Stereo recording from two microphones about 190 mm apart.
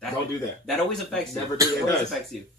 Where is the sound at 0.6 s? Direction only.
Centre (ahead or behind).